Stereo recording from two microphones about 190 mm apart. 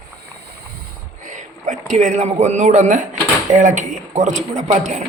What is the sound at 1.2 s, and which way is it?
A man's voice, 40° right (ahead or behind).